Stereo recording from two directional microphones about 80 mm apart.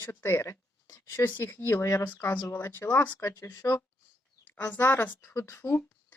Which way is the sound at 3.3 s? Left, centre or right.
Left.